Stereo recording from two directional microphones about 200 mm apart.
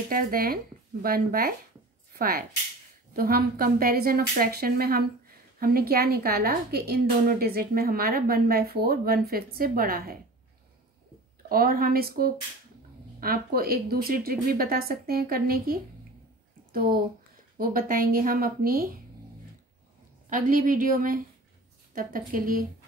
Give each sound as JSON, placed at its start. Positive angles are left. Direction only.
{"t": 0.1, "sound": "a woman's voice", "side_deg": -45}
{"t": 11.4, "sound": "a woman's voice", "side_deg": -45}
{"t": 20.2, "sound": "a woman's voice", "side_deg": -40}